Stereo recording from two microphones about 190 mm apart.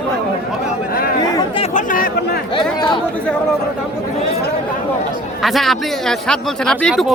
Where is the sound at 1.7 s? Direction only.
45° left (ahead or behind).